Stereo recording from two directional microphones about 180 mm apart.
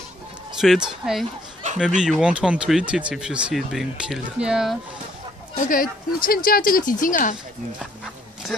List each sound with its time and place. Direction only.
0.6 s speech: 5° right (ahead or behind)
5.6 s speech: 50° left (ahead or behind)